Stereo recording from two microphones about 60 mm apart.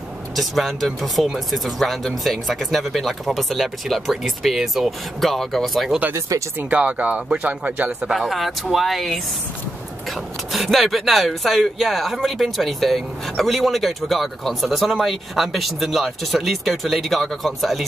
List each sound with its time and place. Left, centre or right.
0.4 s speech: centre
6.1 s speech: right
6.7 s speech: right
8.1 s speech: centre
10.5 s speech: centre